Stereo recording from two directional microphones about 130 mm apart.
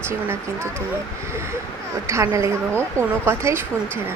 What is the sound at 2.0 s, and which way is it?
A woman's voice, 20° right (ahead or behind).